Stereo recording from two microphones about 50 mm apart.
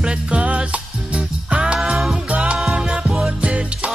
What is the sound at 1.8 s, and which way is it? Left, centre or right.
Music, centre.